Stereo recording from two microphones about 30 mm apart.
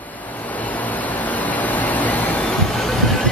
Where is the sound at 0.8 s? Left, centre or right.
Left.